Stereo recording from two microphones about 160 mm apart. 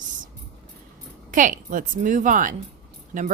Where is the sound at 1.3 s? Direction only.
55° right (ahead or behind).